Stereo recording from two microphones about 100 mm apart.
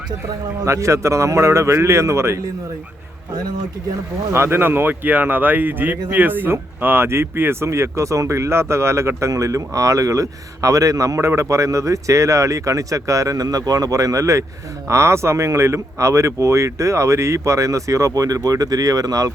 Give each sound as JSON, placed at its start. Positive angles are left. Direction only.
{"t": 0.6, "sound": "a man's voice", "side_deg": -30}
{"t": 4.3, "sound": "speech", "side_deg": -25}